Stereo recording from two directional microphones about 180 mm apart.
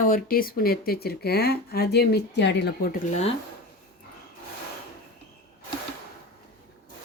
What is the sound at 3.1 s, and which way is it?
Speech, 35° left (ahead or behind).